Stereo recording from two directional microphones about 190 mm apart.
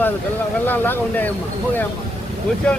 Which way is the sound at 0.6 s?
10° left (ahead or behind).